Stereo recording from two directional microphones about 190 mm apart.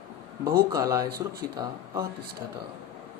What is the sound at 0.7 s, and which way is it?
Speech, 15° right (ahead or behind).